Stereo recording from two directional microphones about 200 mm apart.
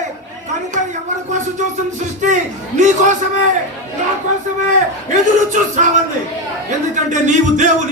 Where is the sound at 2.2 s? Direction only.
35° right (ahead or behind).